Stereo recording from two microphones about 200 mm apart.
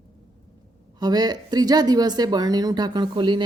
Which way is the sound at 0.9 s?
20° right (ahead or behind).